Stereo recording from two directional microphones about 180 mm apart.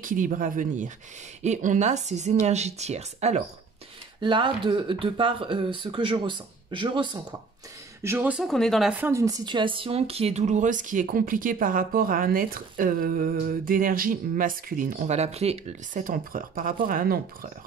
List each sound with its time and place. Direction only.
0.0 s speech: 50° right (ahead or behind)
4.2 s speech: 25° right (ahead or behind)
8.0 s speech: 10° right (ahead or behind); by 17.5 s 50° right (ahead or behind)